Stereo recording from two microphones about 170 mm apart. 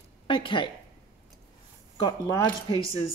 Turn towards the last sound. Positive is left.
turn(degrees=30)  # may be behind; listen again after turning